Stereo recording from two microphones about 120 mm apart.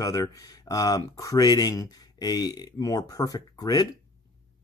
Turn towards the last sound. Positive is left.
turn(degrees=30)  # may be behind; listen again after turning